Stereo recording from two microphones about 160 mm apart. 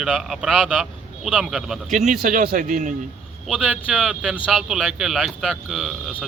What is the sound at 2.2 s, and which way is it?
Speech, 65° right (ahead or behind).